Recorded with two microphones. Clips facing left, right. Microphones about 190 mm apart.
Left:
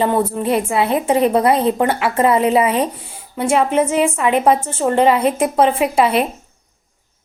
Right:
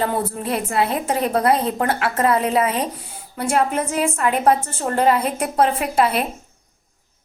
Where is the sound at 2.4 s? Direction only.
Centre (ahead or behind).